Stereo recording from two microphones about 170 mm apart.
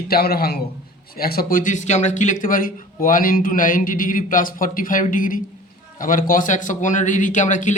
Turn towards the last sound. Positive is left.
turn(degrees=45)  # may be behind; listen again after turning